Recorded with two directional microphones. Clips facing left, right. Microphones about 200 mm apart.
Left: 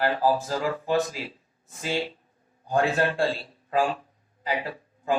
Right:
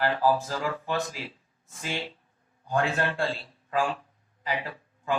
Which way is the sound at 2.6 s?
35° left (ahead or behind).